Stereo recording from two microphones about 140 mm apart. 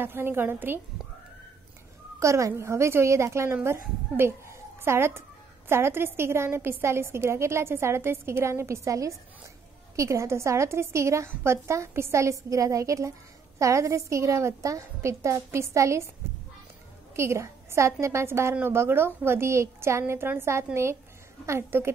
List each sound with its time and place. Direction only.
0.0 s a woman's voice: 15° right (ahead or behind)
2.1 s a woman's voice: 20° right (ahead or behind)
17.1 s a woman's voice: 20° right (ahead or behind)